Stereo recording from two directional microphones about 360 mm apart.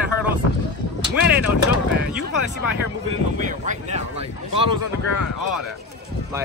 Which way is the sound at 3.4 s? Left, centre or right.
Right.